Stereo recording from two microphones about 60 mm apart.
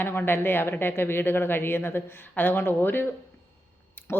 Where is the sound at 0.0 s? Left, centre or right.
Left.